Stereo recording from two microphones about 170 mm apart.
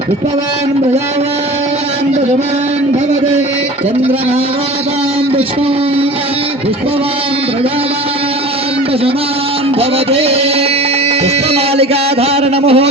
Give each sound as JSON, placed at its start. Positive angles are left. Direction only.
{"t": 10.1, "sound": "a man's voice", "side_deg": -35}
{"t": 11.5, "sound": "a man's voice", "side_deg": -35}